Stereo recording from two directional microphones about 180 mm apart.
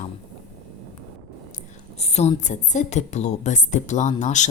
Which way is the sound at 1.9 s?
35° left (ahead or behind).